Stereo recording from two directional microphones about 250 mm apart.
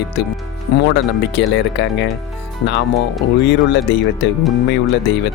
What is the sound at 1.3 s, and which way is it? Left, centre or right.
Speech, left.